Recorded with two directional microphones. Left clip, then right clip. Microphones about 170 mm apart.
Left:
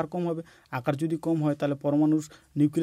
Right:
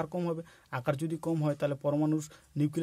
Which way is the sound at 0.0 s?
20° left (ahead or behind).